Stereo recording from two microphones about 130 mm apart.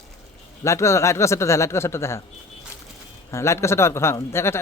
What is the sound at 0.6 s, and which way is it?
Speech, 20° left (ahead or behind).